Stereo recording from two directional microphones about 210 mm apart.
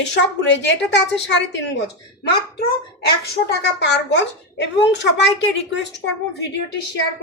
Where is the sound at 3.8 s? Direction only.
55° left (ahead or behind).